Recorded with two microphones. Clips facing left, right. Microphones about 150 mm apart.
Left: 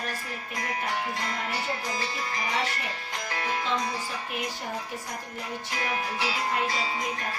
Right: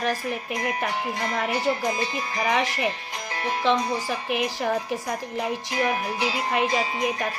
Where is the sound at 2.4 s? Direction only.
70° right (ahead or behind).